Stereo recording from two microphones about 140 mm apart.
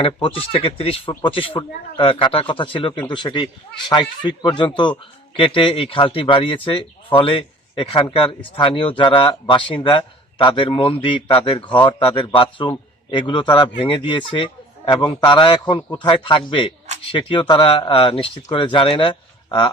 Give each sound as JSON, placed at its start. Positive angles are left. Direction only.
{"t": 0.0, "sound": "speech", "side_deg": 40}